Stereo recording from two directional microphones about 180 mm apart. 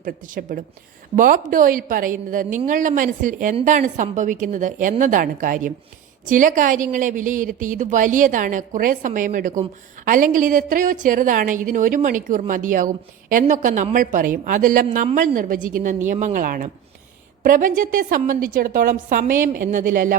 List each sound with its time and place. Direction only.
0.0 s a woman's voice: 50° right (ahead or behind)